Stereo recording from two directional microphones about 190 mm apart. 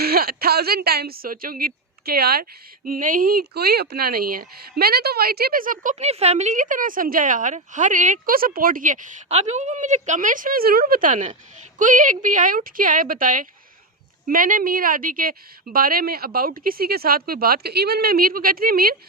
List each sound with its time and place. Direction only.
0.0 s a woman's voice: 50° right (ahead or behind)